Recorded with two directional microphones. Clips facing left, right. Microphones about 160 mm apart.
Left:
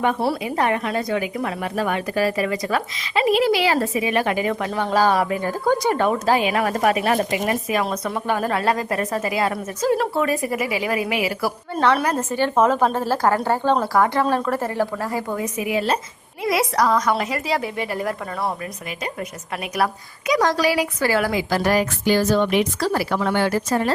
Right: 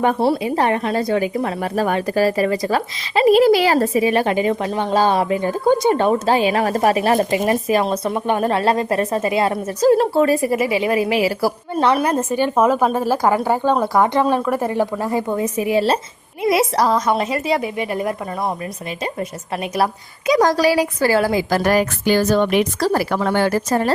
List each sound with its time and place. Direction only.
0.0 s a woman's voice: 35° right (ahead or behind)
11.7 s a woman's voice: 15° right (ahead or behind)
19.7 s speech: 30° right (ahead or behind)
21.5 s a woman's voice: 50° right (ahead or behind)